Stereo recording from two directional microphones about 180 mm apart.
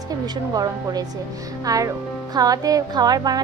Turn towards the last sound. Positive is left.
turn(degrees=-20)  # may be behind; listen again after turning